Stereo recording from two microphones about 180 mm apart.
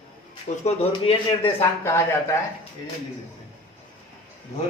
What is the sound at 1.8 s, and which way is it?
Speech, 15° left (ahead or behind).